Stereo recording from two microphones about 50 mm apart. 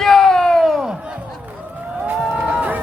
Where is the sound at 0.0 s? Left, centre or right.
Centre.